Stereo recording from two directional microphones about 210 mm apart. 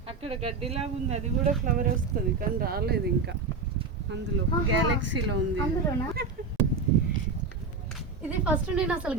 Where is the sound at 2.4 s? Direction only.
45° right (ahead or behind).